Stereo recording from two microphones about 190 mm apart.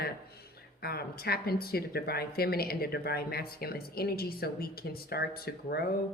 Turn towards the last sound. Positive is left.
turn(degrees=55)  # may be behind; listen again after turning